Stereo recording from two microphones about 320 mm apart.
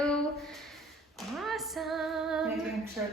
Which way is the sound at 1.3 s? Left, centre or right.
Centre.